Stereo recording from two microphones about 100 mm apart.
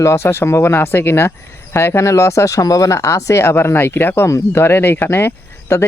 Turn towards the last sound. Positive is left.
turn(degrees=25)  # may be behind; listen again after turning